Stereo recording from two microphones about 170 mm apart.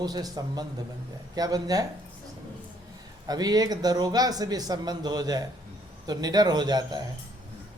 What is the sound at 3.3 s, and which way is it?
Speech, 20° right (ahead or behind).